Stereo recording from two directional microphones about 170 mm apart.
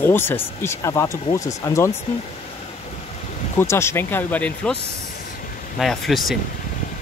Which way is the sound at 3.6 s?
15° left (ahead or behind).